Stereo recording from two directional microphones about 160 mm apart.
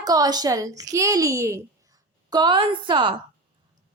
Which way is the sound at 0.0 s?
25° right (ahead or behind).